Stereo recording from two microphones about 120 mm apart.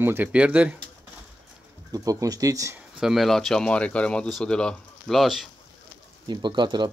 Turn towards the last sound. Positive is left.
turn(degrees=-40)  # may be behind; listen again after turning